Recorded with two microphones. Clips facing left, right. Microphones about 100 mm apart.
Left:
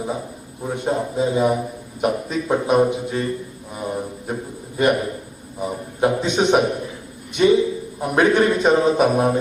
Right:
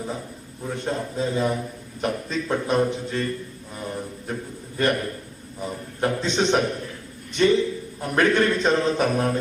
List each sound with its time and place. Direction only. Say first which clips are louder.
0.0 s a man's voice: left 5 dB; 15° left (ahead or behind)